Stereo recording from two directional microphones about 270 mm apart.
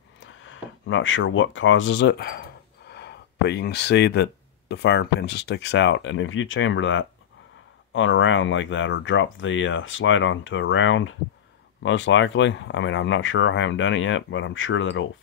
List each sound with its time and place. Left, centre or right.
0.4 s speech: left